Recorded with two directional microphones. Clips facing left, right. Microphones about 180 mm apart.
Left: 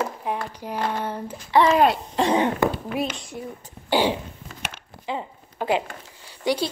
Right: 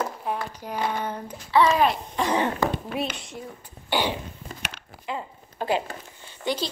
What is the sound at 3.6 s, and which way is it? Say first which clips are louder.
Speech: left 5 dB; 30° left (ahead or behind).